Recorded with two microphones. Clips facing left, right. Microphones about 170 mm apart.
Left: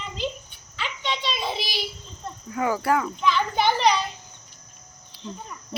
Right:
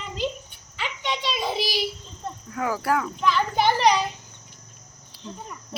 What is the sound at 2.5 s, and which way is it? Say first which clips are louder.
A child's voice: left 2 dB; centre (ahead or behind).